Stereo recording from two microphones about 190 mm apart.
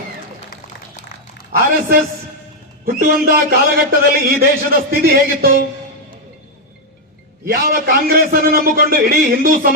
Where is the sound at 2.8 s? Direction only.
50° right (ahead or behind).